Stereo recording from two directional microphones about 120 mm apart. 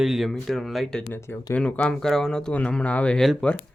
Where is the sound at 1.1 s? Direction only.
20° left (ahead or behind).